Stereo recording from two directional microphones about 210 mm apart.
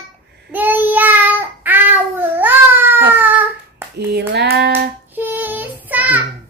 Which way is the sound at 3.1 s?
10° right (ahead or behind).